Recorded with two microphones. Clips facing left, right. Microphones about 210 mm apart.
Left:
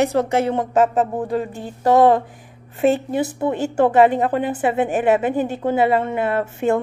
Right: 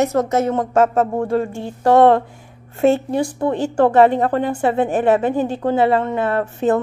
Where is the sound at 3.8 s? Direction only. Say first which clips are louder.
Right 1 dB; 20° left (ahead or behind).